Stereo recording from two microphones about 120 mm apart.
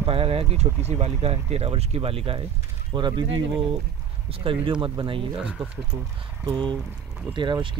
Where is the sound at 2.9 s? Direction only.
40° right (ahead or behind).